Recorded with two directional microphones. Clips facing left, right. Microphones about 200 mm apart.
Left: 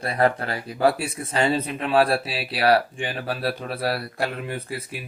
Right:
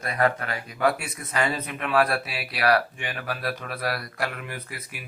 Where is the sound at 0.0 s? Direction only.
30° left (ahead or behind).